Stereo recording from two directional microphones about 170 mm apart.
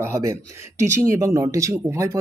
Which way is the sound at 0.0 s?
15° right (ahead or behind).